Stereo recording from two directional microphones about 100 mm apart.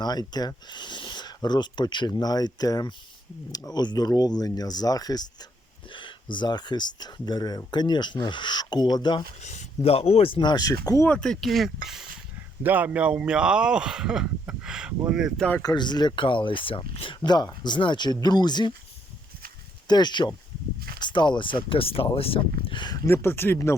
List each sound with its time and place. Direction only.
0.0 s speech: 40° left (ahead or behind)
5.9 s speech: 55° left (ahead or behind)
9.8 s speech: 85° left; by 10.5 s 60° left (ahead or behind)
10.5 s speech: 40° left (ahead or behind)
11.1 s speech: 5° left (ahead or behind)
12.6 s speech: 15° right (ahead or behind)
15.4 s speech: 15° left (ahead or behind)
15.6 s speech: 45° left (ahead or behind)
19.9 s speech: 45° left (ahead or behind); by 22.8 s 70° left (ahead or behind)
23.0 s speech: 25° left (ahead or behind)